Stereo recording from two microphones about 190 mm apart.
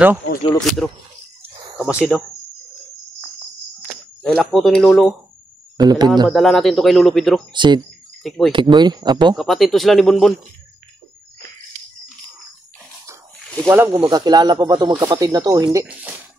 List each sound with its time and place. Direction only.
0.6 s speech: centre (ahead or behind)
2.0 s speech: 10° left (ahead or behind)
4.4 s speech: centre (ahead or behind)
5.8 s speech: 20° right (ahead or behind)
6.3 s speech: centre (ahead or behind)
7.5 s speech: 25° right (ahead or behind)
8.2 s speech: centre (ahead or behind)
8.5 s speech: 25° right (ahead or behind)
9.4 s speech: centre (ahead or behind)
13.4 s snake: 5° left (ahead or behind)
13.7 s speech: 10° right (ahead or behind)
14.0 s speech: 20° right (ahead or behind)